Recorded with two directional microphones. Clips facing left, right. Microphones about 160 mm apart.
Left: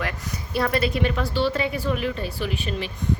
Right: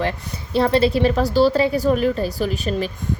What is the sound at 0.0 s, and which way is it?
A woman's voice, 30° right (ahead or behind).